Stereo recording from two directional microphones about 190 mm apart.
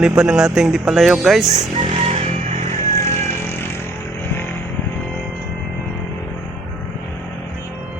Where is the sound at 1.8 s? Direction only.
35° right (ahead or behind).